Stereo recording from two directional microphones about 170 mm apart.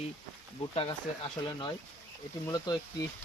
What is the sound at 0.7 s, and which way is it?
Speech, 35° left (ahead or behind).